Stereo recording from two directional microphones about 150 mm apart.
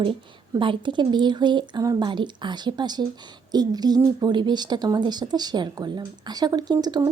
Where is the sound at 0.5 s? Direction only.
35° right (ahead or behind).